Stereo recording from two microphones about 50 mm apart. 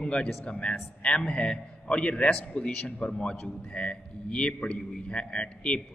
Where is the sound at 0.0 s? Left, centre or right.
Left.